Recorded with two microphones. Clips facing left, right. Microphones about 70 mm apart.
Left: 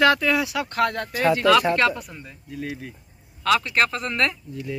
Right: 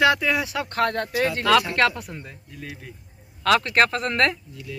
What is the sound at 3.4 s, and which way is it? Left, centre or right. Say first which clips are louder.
Speech: right 2 dB; right.